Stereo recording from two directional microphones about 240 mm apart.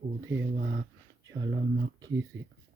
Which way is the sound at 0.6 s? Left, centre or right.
Right.